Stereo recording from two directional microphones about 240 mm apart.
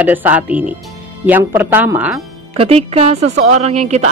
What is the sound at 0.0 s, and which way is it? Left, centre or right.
Speech, centre.